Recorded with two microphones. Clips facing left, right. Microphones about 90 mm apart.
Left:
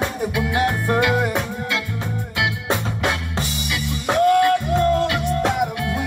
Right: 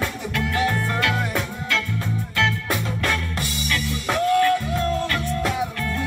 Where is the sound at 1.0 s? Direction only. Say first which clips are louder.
Left 4 dB; 10° left (ahead or behind).